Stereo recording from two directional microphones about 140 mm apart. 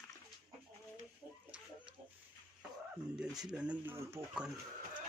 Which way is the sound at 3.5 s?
10° right (ahead or behind).